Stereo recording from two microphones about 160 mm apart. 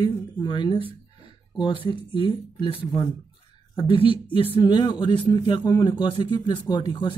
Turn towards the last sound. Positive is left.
turn(degrees=30)  # may be behind; listen again after turning